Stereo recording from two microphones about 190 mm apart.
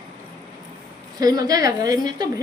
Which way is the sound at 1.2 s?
20° right (ahead or behind).